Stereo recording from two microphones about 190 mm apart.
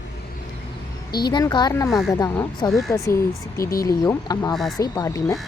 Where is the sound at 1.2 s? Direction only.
20° left (ahead or behind).